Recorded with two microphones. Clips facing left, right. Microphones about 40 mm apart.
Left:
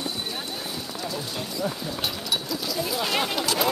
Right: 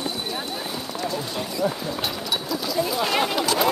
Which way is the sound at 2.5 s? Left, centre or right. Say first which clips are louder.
Right 4 dB; centre.